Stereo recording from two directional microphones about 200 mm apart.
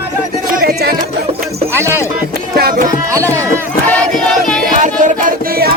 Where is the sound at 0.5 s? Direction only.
50° right (ahead or behind).